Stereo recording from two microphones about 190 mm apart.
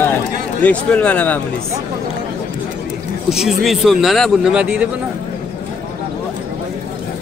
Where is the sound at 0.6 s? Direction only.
10° left (ahead or behind).